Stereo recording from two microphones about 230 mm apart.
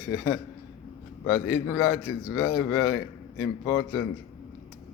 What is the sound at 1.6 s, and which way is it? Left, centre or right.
Speech, centre.